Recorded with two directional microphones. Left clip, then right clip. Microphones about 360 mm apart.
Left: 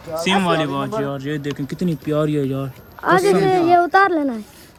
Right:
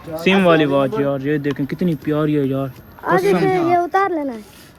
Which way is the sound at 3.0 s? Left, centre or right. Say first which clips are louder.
Left 1 dB; left.